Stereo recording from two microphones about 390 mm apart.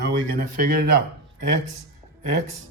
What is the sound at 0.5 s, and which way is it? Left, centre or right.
Speech, right.